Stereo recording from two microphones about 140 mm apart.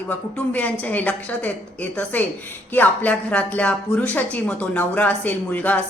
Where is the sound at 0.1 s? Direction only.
10° left (ahead or behind).